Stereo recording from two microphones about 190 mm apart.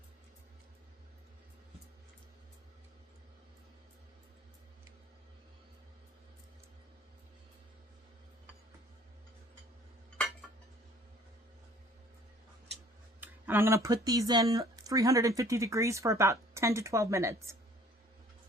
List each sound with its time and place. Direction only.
13.1 s speech: 10° right (ahead or behind)